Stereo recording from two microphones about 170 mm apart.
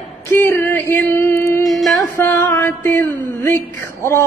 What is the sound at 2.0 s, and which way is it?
A woman's voice, 15° left (ahead or behind).